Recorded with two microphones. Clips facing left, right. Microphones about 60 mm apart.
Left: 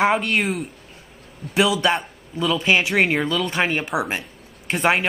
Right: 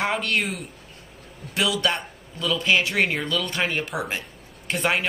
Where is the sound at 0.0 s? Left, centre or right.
Centre.